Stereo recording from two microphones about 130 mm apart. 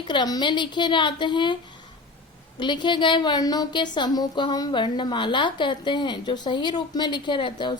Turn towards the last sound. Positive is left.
turn(degrees=40)  # may be behind; listen again after turning